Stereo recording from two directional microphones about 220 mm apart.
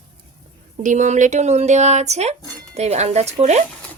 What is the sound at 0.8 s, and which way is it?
Speech, 35° right (ahead or behind).